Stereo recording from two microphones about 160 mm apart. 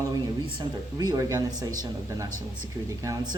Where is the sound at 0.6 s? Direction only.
25° right (ahead or behind).